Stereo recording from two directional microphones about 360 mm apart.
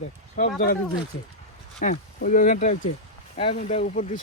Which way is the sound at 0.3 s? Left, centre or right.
Left.